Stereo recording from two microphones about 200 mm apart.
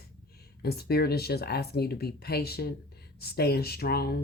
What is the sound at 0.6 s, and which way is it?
Speech, 50° left (ahead or behind).